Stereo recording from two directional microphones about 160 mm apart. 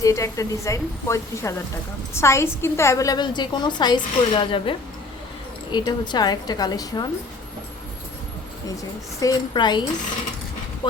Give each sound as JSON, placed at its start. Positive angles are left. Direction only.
{"t": 0.0, "sound": "a woman's voice", "side_deg": 20}
{"t": 5.7, "sound": "a woman's voice", "side_deg": 25}
{"t": 9.2, "sound": "a woman's voice", "side_deg": 25}